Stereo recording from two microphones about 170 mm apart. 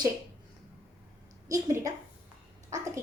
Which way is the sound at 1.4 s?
20° right (ahead or behind).